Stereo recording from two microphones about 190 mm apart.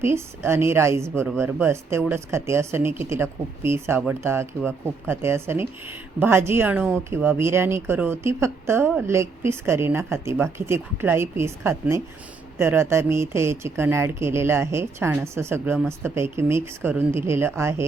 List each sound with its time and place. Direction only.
0.0 s speech: 15° right (ahead or behind)